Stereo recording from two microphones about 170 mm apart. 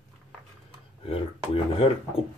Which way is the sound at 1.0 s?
35° left (ahead or behind).